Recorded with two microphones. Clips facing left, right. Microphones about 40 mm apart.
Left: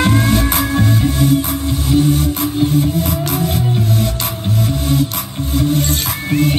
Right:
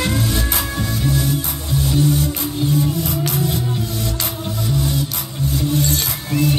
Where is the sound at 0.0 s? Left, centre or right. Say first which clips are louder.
Left 6 dB; left.